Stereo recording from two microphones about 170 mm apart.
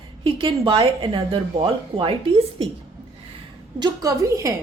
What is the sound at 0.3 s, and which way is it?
Speech, 30° right (ahead or behind).